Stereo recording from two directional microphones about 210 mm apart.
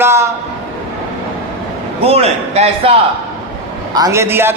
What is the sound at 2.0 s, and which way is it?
Speech, 30° right (ahead or behind).